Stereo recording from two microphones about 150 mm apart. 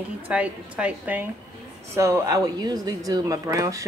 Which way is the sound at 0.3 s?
10° right (ahead or behind).